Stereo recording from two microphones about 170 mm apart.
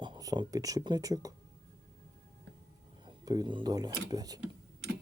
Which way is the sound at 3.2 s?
25° right (ahead or behind).